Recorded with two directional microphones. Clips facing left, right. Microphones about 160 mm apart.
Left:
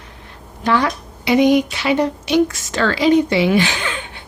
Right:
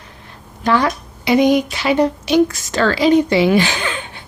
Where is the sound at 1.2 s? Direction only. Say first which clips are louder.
Even; 40° right (ahead or behind).